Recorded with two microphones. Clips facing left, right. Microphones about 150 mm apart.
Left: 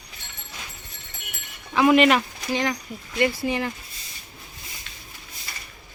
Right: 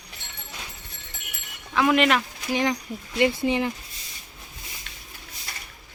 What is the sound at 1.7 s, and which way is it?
Speech, 5° left (ahead or behind).